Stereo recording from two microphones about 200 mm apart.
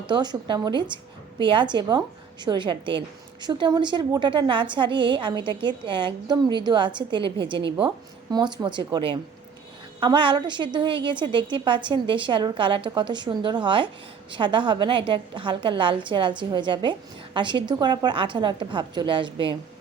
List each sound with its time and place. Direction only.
0.1 s a woman's voice: 20° right (ahead or behind)